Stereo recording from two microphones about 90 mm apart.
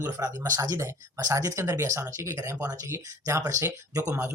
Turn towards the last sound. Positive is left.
turn(degrees=-30)  # may be behind; listen again after turning